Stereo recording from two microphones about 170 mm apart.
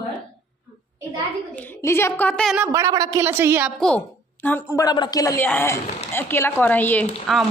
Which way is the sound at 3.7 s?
5° left (ahead or behind).